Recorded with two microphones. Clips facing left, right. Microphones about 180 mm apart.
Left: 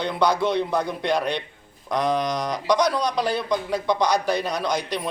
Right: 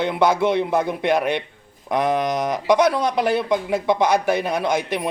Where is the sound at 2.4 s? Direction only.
25° right (ahead or behind).